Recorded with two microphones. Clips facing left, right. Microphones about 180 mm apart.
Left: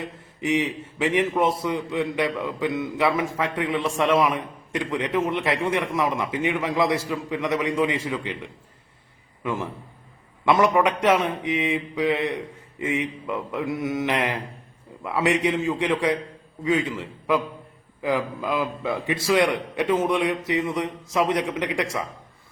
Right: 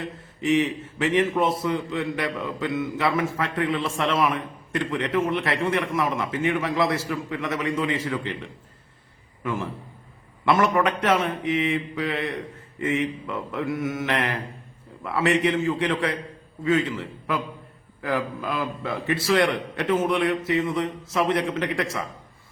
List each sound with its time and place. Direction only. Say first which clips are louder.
0.4 s a man's voice: right 2 dB; 15° left (ahead or behind)